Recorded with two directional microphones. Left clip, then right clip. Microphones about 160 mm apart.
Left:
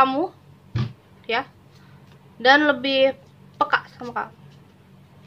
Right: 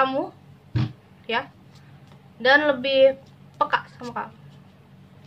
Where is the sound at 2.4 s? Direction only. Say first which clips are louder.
Left 2 dB; 35° left (ahead or behind).